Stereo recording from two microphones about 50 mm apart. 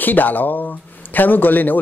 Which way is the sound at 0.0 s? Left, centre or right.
Left.